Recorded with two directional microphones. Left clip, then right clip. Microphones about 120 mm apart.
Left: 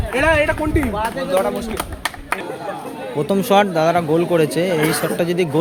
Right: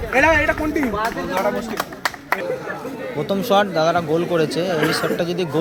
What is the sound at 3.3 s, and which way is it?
Speech, 85° left.